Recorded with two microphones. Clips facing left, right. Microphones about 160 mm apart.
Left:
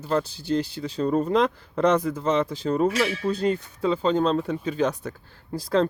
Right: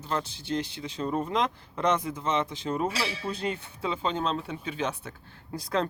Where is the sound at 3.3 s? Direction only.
40° left (ahead or behind).